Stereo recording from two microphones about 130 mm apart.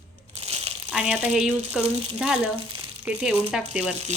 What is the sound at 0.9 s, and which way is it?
Speech, 5° right (ahead or behind).